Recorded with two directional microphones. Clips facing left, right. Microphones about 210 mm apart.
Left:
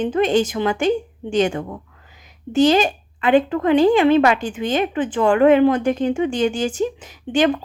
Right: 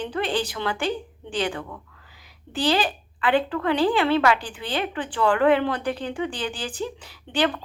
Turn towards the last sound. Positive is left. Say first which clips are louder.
# left 7 dB
turn(degrees=20)  # may be behind; listen again after turning